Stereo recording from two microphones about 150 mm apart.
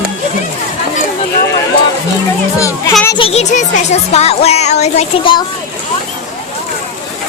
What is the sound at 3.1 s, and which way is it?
Speech, 40° left (ahead or behind).